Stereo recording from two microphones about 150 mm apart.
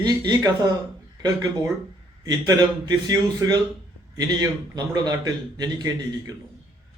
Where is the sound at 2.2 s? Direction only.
25° right (ahead or behind).